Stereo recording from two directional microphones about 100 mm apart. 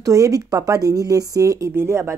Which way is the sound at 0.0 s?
35° right (ahead or behind).